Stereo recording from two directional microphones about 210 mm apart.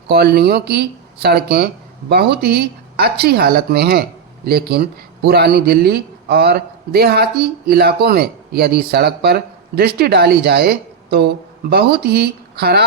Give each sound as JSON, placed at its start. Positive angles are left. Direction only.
{"t": 0.1, "sound": "speech", "side_deg": -50}